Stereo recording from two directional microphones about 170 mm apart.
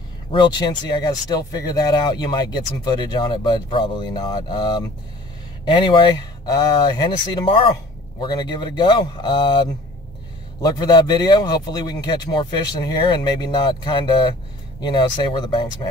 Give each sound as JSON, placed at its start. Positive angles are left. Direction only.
{"t": 0.3, "sound": "speech", "side_deg": 25}